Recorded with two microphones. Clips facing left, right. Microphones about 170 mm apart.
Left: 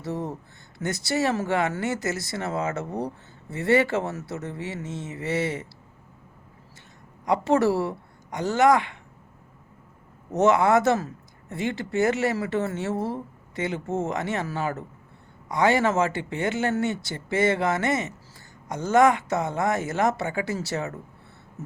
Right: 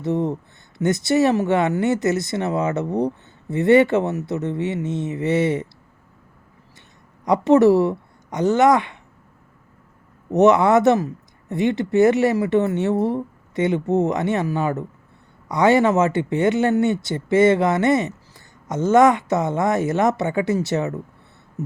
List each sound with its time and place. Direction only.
0.0 s speech: 20° right (ahead or behind)
7.3 s speech: 20° right (ahead or behind)
10.3 s speech: 20° right (ahead or behind)